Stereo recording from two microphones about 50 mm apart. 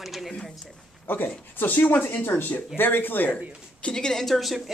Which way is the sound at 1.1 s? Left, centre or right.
Left.